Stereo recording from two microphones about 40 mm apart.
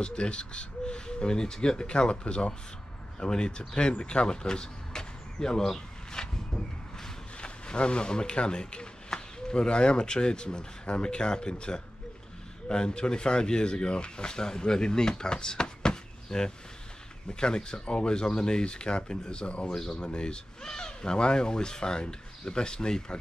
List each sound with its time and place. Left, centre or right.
0.0 s speech: left
19.7 s speech: centre
20.0 s speech: left